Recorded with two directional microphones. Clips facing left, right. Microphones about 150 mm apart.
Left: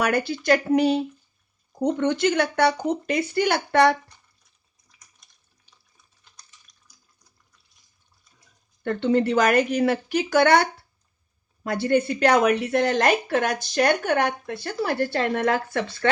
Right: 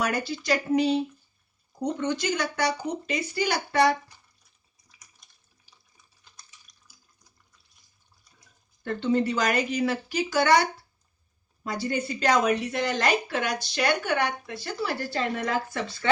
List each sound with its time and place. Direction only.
0.0 s speech: 60° left (ahead or behind)
6.9 s water: 5° right (ahead or behind)
8.8 s speech: 60° left (ahead or behind)